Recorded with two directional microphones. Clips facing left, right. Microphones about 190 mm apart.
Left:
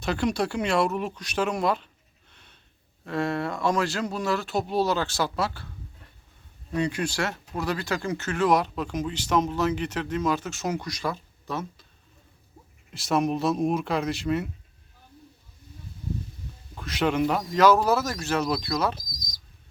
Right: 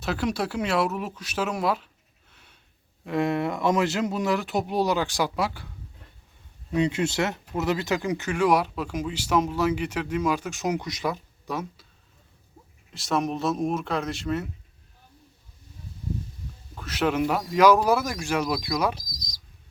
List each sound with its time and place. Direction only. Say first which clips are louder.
0.0 s speech: left 1 dB; 5° right (ahead or behind)
2.3 s sniff: even; 10° right (ahead or behind)
3.0 s speech: right 3 dB; 15° right (ahead or behind)
6.7 s speech: right 3 dB; 20° right (ahead or behind)
12.9 s speech: left 2 dB; centre (ahead or behind)
16.7 s speech: even; 5° right (ahead or behind)
19.0 s bird: even; 50° left (ahead or behind)